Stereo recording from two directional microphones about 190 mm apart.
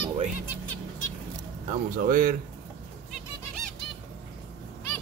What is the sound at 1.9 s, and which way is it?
Speech, 50° right (ahead or behind).